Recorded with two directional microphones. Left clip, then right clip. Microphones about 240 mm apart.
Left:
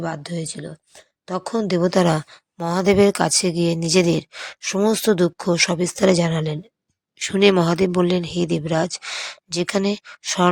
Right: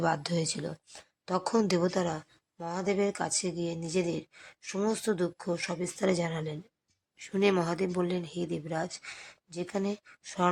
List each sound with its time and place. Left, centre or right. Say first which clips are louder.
0.0 s a woman's voice: left 2 dB; centre
1.9 s speech: left 13 dB; left